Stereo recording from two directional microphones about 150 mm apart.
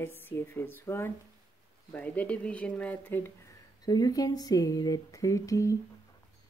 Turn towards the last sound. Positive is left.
turn(degrees=20)  # may be behind; listen again after turning